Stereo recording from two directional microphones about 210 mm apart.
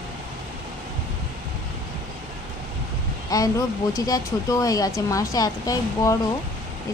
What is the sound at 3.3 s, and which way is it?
Speech, 15° left (ahead or behind).